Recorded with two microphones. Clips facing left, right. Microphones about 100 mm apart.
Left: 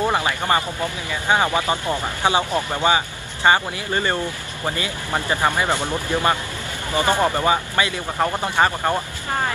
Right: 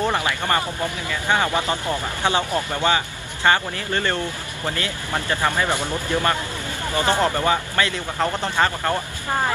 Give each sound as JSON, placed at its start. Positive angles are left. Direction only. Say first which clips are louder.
{"t": 0.0, "sound": "speech", "louder": "left 1 dB", "side_deg": 15}